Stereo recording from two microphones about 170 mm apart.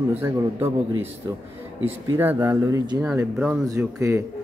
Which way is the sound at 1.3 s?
20° right (ahead or behind).